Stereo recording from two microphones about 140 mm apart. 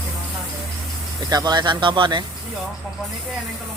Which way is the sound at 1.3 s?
30° right (ahead or behind).